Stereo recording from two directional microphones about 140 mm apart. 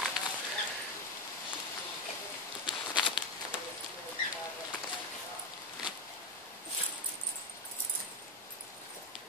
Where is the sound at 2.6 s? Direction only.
35° left (ahead or behind).